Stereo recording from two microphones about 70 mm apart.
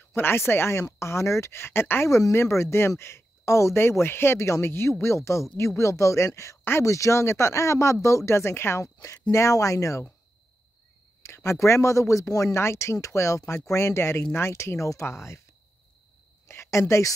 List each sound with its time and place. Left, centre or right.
0.1 s speech: left
9.3 s speech: left
11.2 s speech: left
16.4 s a woman's voice: left